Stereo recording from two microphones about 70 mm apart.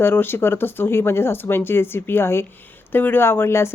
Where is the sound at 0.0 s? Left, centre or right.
Left.